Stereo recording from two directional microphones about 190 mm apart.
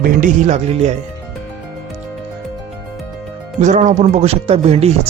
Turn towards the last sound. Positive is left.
turn(degrees=-30)  # may be behind; listen again after turning